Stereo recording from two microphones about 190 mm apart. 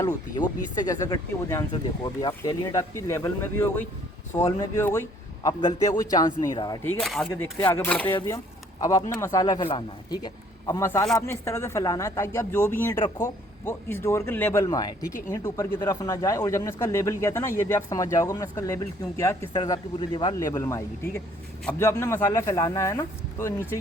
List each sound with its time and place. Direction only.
0.0 s speech: 20° left (ahead or behind)
7.0 s speech: centre (ahead or behind)
7.6 s speech: 10° left (ahead or behind)